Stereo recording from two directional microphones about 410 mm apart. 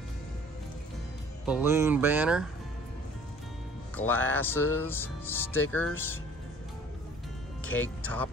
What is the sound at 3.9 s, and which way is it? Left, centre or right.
Speech, centre.